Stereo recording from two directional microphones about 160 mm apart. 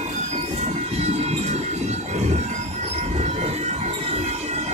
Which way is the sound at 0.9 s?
40° right (ahead or behind).